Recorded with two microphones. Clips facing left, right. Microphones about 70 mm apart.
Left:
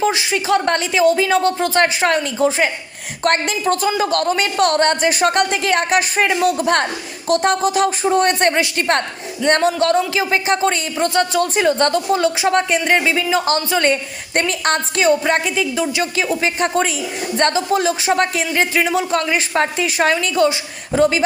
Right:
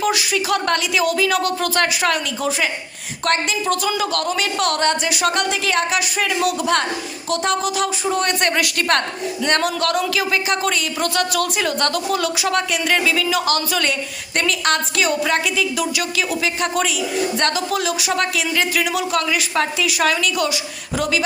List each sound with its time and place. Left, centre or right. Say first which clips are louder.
0.0 s speech: left 2 dB; left
3.2 s speech: left 3 dB; left